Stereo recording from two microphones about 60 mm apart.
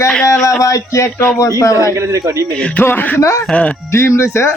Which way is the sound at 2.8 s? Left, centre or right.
Left.